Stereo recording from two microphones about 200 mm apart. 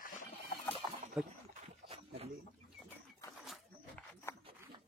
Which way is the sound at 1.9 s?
30° right (ahead or behind).